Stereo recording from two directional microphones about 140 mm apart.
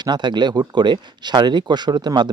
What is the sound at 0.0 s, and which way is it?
A man's voice, 30° right (ahead or behind).